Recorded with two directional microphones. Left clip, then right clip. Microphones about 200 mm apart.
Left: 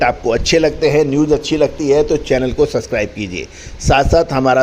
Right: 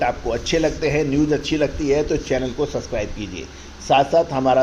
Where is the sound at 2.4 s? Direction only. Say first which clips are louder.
Left 8 dB; 55° left (ahead or behind).